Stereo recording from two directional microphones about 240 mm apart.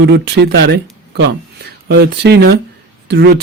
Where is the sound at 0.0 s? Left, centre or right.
Right.